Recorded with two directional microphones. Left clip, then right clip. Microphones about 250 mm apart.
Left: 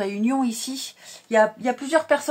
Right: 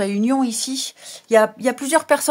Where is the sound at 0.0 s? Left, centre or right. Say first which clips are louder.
Right 4 dB; right.